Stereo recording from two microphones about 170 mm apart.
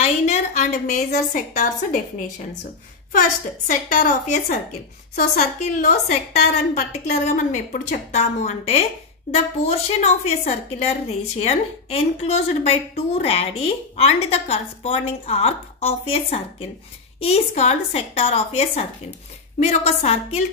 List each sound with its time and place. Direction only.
0.0 s a woman's voice: 40° left (ahead or behind)
3.6 s a woman's voice: 55° left (ahead or behind); by 20.4 s 40° left (ahead or behind)